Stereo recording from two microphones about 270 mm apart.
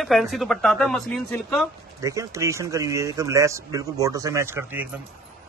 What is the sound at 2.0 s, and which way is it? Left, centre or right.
A man's voice, centre.